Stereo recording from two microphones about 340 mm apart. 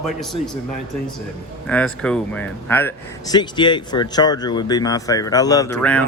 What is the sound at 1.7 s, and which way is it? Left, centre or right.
Speech, centre.